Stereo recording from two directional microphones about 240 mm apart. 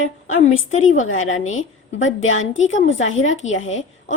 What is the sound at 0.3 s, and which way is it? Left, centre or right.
A woman's voice, left.